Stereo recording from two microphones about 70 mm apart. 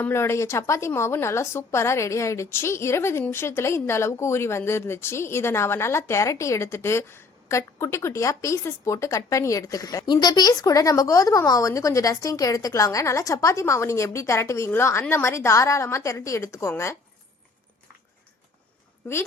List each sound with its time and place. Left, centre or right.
0.0 s speech: left
10.1 s speech: left